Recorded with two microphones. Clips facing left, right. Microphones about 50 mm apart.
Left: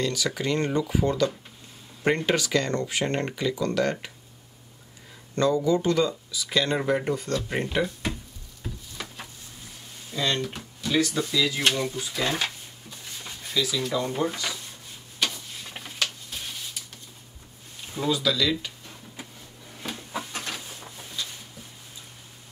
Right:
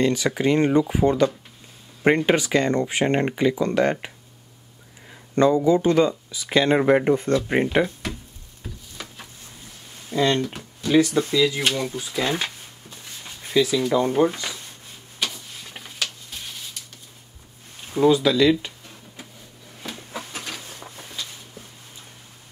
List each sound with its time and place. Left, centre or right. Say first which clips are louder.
0.0 s speech: right 7 dB; right
5.3 s speech: right 5 dB; right
8.6 s a sound: left 1 dB; centre
10.1 s speech: right 6 dB; right
11.4 s speech: right 3 dB; centre
11.9 s speech: right 3 dB; centre
13.5 s speech: right 7 dB; right
15.1 s tick-tock: even; centre
17.9 s speech: right 8 dB; right
20.2 s a sound: left 1 dB; centre